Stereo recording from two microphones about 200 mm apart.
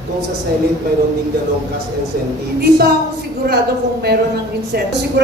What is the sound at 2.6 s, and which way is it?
A woman's voice, 50° right (ahead or behind).